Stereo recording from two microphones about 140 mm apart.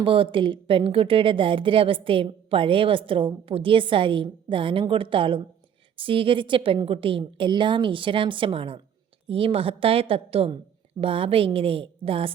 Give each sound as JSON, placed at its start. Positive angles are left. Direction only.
{"t": 0.0, "sound": "a woman's voice", "side_deg": -40}